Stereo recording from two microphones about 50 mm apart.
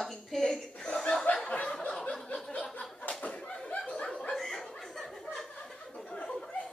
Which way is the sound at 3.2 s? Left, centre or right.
Left.